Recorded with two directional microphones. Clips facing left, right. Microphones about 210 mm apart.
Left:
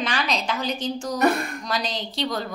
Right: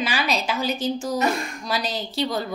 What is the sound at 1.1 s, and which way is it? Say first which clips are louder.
Speech: left 5 dB; 60° left (ahead or behind).